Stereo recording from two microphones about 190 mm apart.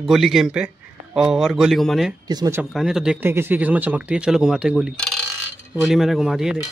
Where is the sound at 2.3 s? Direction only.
20° right (ahead or behind).